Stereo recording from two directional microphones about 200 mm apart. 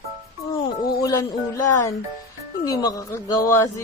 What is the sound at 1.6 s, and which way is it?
Speech, 10° left (ahead or behind).